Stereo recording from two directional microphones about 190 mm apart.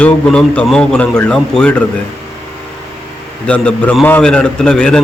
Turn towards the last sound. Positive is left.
turn(degrees=5)  # may be behind; listen again after turning